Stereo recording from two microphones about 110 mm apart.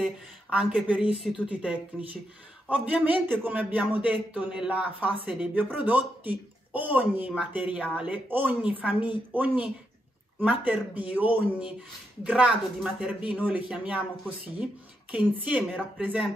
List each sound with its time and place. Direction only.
0.0 s a man's voice: 10° right (ahead or behind)